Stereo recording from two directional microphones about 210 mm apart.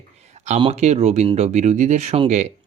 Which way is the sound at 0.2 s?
35° right (ahead or behind).